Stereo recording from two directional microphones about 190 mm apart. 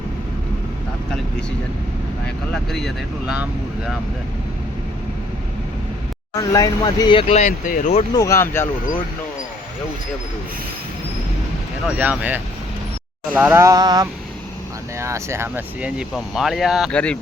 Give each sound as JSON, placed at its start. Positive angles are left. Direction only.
{"t": 2.2, "sound": "speech", "side_deg": 5}
{"t": 6.3, "sound": "speech", "side_deg": 20}
{"t": 8.1, "sound": "speech", "side_deg": 15}
{"t": 11.9, "sound": "a sound", "side_deg": -5}
{"t": 14.9, "sound": "speech", "side_deg": -15}